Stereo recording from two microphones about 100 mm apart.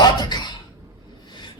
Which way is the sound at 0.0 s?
45° left (ahead or behind).